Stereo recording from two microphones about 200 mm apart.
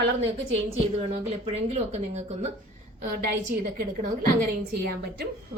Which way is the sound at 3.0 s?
45° right (ahead or behind).